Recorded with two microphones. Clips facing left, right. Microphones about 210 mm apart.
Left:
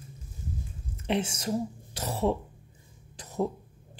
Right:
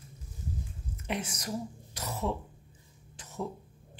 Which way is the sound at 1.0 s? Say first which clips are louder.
Left 7 dB; 30° left (ahead or behind).